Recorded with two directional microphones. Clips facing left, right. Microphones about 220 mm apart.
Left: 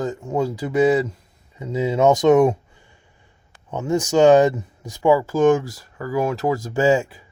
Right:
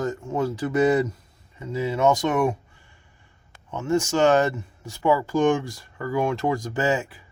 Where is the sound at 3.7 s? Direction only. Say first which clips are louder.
Left 2 dB; 15° left (ahead or behind).